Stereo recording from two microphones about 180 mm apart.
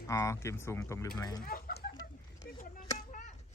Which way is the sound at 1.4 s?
55° left (ahead or behind).